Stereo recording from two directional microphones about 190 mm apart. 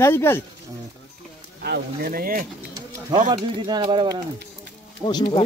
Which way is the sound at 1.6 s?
55° right (ahead or behind).